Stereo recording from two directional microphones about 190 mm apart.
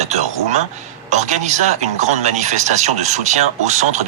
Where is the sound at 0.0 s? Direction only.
35° right (ahead or behind).